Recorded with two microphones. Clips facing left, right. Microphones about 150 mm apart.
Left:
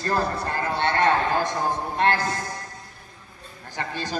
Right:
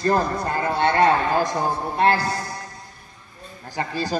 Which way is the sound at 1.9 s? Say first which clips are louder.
Right 4 dB; 10° right (ahead or behind).